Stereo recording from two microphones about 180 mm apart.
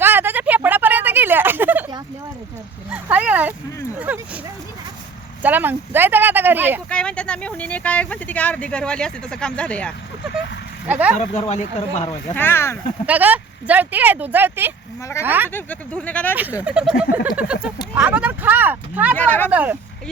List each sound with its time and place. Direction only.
0.0 s a sound: 10° right (ahead or behind)
2.9 s speech: 5° right (ahead or behind)
5.4 s speech: 10° right (ahead or behind)
6.9 s speech: 5° left (ahead or behind)
10.8 s speech: 5° right (ahead or behind)
11.2 s speech: 35° left (ahead or behind)
12.3 s speech: 10° left (ahead or behind)
13.1 s speech: 10° right (ahead or behind)
15.4 s speech: 10° left (ahead or behind)
16.3 s speech: 10° right (ahead or behind)
19.1 s speech: 10° left (ahead or behind)
19.5 s speech: 10° right (ahead or behind)